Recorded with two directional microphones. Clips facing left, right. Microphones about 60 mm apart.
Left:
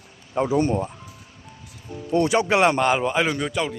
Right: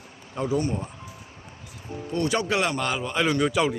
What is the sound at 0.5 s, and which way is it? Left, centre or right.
Speech, left.